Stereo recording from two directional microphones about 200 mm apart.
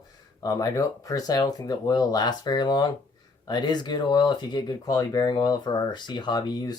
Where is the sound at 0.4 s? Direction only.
20° left (ahead or behind).